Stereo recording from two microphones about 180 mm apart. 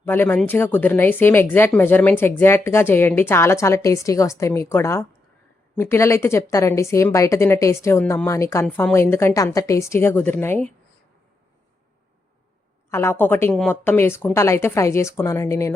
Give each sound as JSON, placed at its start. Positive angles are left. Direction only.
{"t": 0.0, "sound": "a woman's voice", "side_deg": 10}
{"t": 12.9, "sound": "a woman's voice", "side_deg": 15}